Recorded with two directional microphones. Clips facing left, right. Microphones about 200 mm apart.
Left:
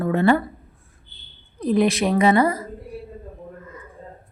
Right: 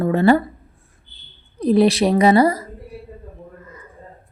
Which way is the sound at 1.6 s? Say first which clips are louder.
Right 4 dB; 35° right (ahead or behind).